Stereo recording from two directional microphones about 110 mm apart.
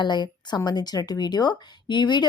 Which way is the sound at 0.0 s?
45° left (ahead or behind).